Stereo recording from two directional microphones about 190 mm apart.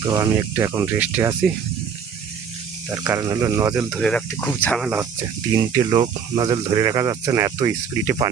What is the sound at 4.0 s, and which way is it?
Speech, 5° left (ahead or behind).